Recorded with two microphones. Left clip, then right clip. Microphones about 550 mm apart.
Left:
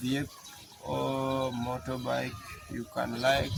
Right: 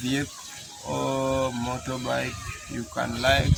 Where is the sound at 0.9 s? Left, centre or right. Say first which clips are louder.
Right 5 dB; left.